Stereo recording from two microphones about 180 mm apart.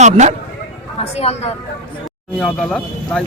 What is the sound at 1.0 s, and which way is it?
Speech, 35° left (ahead or behind).